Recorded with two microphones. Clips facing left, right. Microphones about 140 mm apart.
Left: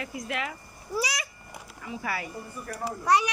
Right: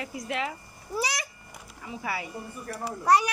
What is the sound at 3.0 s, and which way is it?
Speech, 35° right (ahead or behind).